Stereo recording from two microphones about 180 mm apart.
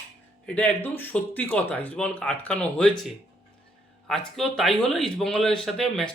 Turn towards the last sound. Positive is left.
turn(degrees=0)  # may be behind; listen again after turning